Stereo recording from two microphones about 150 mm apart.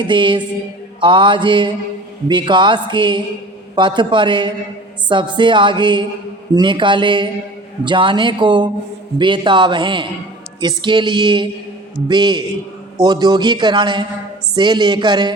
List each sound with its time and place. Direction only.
0.0 s a woman's voice: 30° right (ahead or behind)